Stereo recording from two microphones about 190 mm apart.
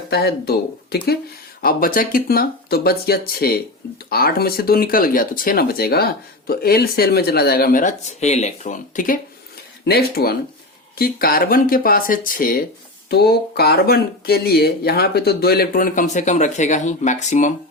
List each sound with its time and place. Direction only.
0.1 s speech: 55° left (ahead or behind)
9.8 s speech: 55° left (ahead or behind); by 17.5 s 40° left (ahead or behind)